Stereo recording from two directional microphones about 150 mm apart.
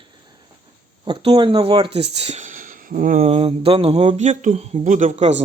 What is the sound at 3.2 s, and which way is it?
A man's voice, 40° right (ahead or behind).